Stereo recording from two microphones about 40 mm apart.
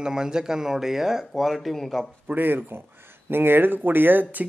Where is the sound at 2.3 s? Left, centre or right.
Right.